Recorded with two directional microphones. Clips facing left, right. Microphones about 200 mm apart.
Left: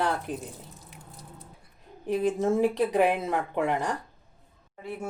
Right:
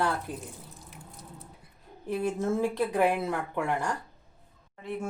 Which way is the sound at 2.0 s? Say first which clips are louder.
Left 4 dB; 15° left (ahead or behind).